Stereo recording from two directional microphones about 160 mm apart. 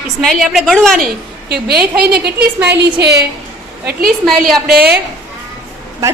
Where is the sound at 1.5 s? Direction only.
80° right.